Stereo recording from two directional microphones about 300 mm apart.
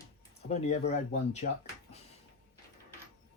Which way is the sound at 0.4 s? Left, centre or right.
Left.